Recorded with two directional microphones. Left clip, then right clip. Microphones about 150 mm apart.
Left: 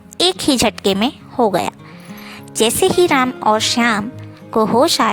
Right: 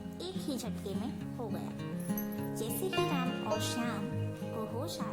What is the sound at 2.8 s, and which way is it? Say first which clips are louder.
Speech: left 18 dB; 90° right.